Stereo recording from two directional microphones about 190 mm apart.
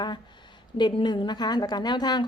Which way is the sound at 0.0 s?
25° left (ahead or behind).